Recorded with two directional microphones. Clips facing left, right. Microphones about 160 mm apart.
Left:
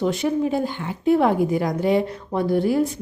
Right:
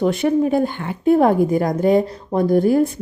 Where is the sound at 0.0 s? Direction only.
55° right (ahead or behind).